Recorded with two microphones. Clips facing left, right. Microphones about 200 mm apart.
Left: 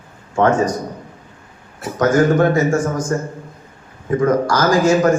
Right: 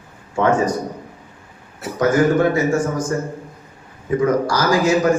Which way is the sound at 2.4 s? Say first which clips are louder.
Left 2 dB; 45° left (ahead or behind).